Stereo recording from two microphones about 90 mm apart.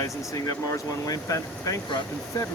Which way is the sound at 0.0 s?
35° left (ahead or behind).